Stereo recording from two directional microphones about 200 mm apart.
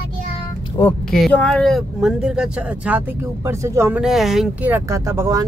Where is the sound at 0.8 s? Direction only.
15° left (ahead or behind).